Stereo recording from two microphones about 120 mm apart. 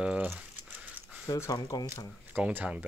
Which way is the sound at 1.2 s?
25° left (ahead or behind).